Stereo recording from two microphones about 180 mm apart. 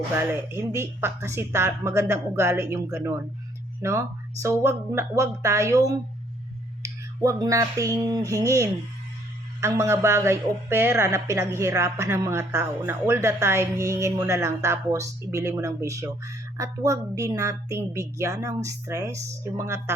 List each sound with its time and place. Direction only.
0.2 s speech: 15° right (ahead or behind)
6.8 s a sound: 20° right (ahead or behind)
9.6 s speech: 15° right (ahead or behind)